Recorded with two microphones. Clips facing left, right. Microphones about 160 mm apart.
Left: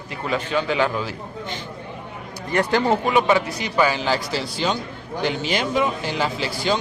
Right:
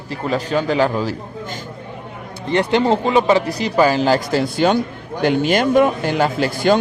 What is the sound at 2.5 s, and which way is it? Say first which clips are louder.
A man's voice: right 4 dB; 25° right (ahead or behind).